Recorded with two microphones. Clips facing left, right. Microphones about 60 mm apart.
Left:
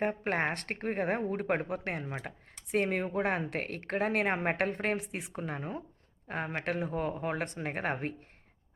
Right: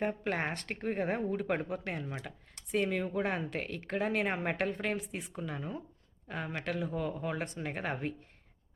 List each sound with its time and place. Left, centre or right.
0.0 s speech: left